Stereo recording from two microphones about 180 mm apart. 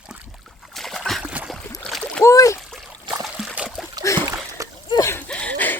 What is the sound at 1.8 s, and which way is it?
Splash, 5° left (ahead or behind).